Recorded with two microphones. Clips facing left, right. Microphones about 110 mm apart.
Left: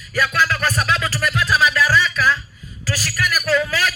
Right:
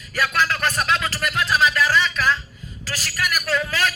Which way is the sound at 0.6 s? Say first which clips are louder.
Left 1 dB; 50° right (ahead or behind).